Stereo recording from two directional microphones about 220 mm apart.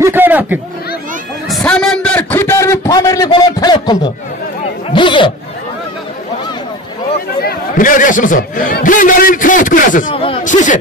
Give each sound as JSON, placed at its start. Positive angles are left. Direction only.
{"t": 0.0, "sound": "chatter", "side_deg": -10}
{"t": 1.6, "sound": "a sound", "side_deg": 5}
{"t": 4.9, "sound": "speech", "side_deg": 20}
{"t": 7.4, "sound": "speech", "side_deg": 35}
{"t": 10.1, "sound": "speech", "side_deg": 25}